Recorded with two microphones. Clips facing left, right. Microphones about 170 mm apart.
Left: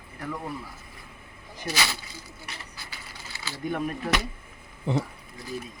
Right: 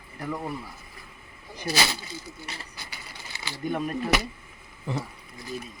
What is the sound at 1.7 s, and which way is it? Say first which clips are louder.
Speech: right 3 dB; 35° right (ahead or behind).